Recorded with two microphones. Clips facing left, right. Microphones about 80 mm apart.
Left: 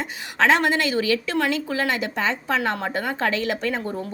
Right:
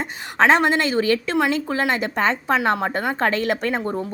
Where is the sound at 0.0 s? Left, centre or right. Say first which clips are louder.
Right 3 dB; right.